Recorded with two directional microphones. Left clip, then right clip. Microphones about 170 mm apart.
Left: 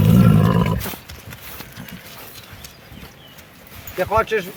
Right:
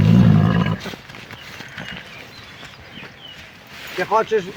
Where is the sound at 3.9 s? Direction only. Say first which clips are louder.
Right 1 dB; 20° left (ahead or behind).